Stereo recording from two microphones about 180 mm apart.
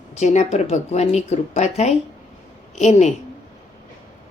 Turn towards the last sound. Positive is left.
turn(degrees=40)  # may be behind; listen again after turning